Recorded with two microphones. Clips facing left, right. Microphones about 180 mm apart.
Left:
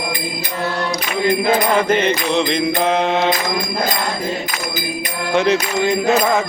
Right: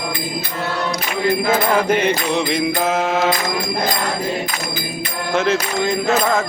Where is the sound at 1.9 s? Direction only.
10° right (ahead or behind).